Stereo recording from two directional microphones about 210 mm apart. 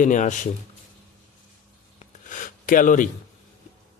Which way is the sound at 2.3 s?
40° left (ahead or behind).